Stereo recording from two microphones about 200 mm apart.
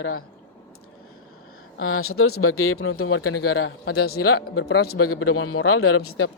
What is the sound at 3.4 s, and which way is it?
Speech, 65° left (ahead or behind).